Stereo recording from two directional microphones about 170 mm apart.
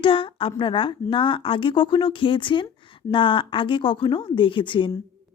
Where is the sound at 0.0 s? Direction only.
30° left (ahead or behind).